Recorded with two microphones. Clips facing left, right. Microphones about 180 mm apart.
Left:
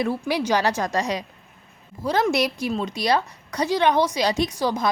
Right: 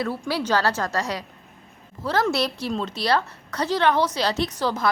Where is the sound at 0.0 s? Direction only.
15° left (ahead or behind).